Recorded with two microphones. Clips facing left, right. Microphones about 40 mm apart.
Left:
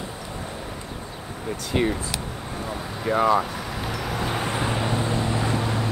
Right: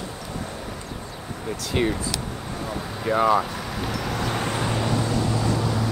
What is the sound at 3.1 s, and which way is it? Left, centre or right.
Speech, centre.